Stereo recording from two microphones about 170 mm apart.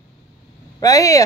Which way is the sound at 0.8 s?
20° left (ahead or behind).